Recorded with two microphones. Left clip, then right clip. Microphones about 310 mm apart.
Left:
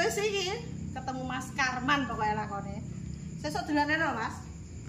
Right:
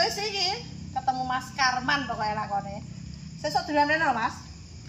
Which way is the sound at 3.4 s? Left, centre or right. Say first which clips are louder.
Right 6 dB; centre.